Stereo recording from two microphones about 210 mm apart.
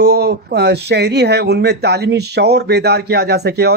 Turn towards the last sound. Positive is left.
turn(degrees=-50)  # may be behind; listen again after turning